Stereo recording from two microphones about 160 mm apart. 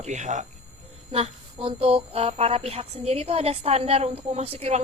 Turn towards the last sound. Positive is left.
turn(degrees=-40)  # may be behind; listen again after turning